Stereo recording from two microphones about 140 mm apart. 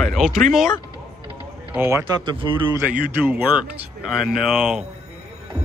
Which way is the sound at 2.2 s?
35° right (ahead or behind).